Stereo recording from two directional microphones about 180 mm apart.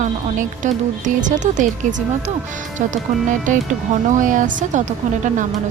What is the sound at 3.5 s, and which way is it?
A woman's voice, 45° right (ahead or behind).